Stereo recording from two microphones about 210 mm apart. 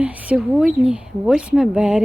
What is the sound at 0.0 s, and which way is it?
Speech, 5° right (ahead or behind).